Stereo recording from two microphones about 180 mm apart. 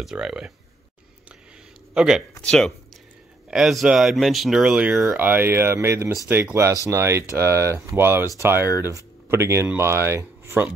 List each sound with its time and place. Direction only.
0.0 s speech: 5° right (ahead or behind)
2.0 s speech: 5° right (ahead or behind)